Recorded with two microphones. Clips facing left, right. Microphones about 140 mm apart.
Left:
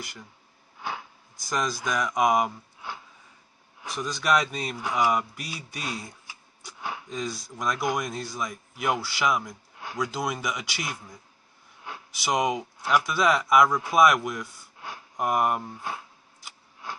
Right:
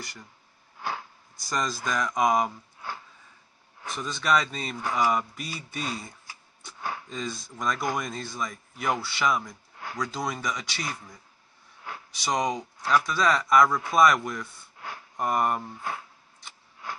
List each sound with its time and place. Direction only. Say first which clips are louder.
0.8 s a sound: right 1 dB; 15° left (ahead or behind)
1.5 s speech: left 1 dB; centre (ahead or behind)
3.9 s speech: left 1 dB; centre (ahead or behind)
12.3 s speech: left 2 dB; 5° left (ahead or behind)
13.7 s speech: left 1 dB; 20° left (ahead or behind)
13.9 s speech: left 1 dB; 5° left (ahead or behind)